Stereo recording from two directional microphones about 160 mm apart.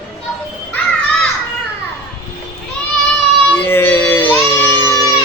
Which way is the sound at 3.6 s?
15° left (ahead or behind).